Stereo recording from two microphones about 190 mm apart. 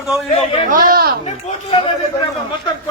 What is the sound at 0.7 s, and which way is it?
Speech, 50° right (ahead or behind).